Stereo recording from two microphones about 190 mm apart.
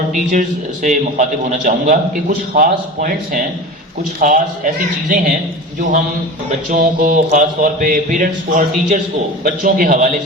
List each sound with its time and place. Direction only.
0.1 s a man's voice: 40° right (ahead or behind)
6.7 s speech: 45° right (ahead or behind)